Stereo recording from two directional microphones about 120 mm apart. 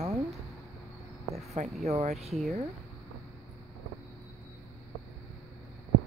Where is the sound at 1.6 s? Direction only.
80° right.